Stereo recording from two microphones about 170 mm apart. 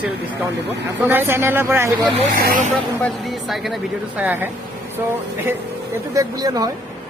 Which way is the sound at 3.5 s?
Centre (ahead or behind).